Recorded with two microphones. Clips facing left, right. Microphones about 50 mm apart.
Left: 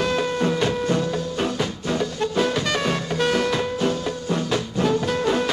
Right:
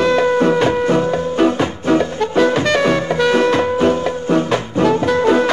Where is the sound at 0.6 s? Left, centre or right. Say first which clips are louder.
Right 7 dB; right.